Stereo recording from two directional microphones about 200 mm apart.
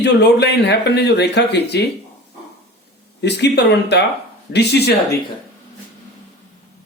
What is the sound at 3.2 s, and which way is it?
A man's voice, 55° left (ahead or behind).